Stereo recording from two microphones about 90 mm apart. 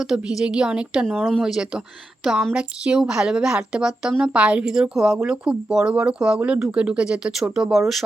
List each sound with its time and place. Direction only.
0.0 s speech: 5° right (ahead or behind)
1.0 s speech: 5° left (ahead or behind)